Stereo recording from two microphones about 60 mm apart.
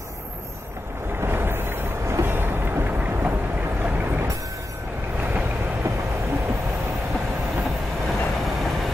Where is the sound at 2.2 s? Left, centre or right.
Right.